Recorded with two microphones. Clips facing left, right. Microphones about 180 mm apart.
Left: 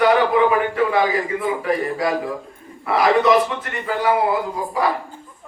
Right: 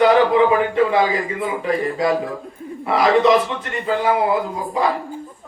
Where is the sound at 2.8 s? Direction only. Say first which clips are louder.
Right 1 dB; 25° right (ahead or behind).